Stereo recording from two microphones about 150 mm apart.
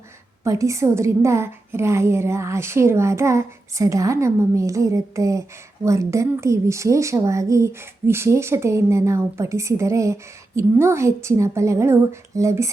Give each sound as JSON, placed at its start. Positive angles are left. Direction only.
{"t": 0.4, "sound": "a woman's voice", "side_deg": -20}